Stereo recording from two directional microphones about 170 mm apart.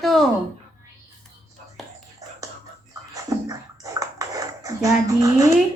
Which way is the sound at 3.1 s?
20° right (ahead or behind).